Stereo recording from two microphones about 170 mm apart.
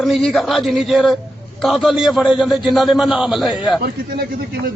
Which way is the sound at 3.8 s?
65° right (ahead or behind).